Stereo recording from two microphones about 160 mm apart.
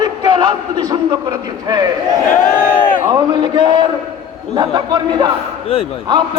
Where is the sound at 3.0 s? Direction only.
30° right (ahead or behind).